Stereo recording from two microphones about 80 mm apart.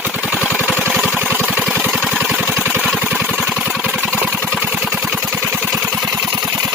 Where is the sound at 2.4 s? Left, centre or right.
Right; by 5.3 s centre.